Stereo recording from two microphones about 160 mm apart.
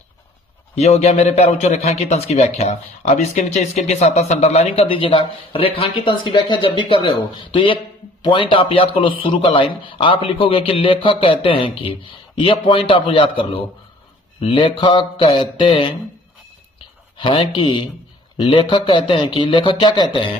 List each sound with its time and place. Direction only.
0.8 s a man's voice: 45° left (ahead or behind)
17.2 s a man's voice: 30° left (ahead or behind)